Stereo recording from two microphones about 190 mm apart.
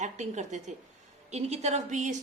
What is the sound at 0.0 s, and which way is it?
A woman's voice, 40° right (ahead or behind).